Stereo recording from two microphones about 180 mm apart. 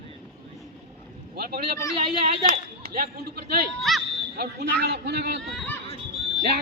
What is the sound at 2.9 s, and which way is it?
Speech, 60° right (ahead or behind).